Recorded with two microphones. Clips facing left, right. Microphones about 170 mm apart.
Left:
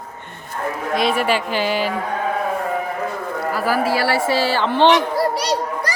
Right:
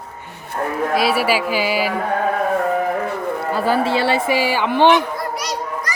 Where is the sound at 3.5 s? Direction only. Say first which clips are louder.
Right 1 dB; 25° right (ahead or behind).